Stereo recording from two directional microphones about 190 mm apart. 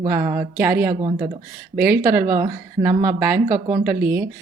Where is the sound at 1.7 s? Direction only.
55° right (ahead or behind).